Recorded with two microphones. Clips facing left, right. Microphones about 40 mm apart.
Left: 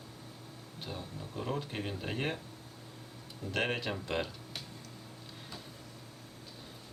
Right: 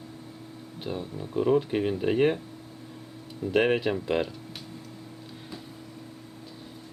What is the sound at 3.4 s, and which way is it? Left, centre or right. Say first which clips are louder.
Speech: right 10 dB; centre.